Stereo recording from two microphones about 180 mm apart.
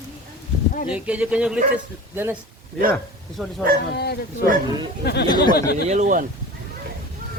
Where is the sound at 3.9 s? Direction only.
65° left (ahead or behind).